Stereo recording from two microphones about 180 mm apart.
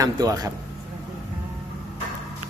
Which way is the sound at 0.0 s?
20° right (ahead or behind).